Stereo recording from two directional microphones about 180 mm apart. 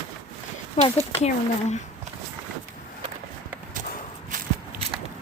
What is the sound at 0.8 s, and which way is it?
Speech, 40° left (ahead or behind).